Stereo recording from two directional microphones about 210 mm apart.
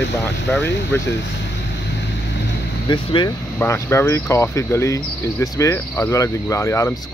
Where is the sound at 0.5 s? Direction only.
5° left (ahead or behind).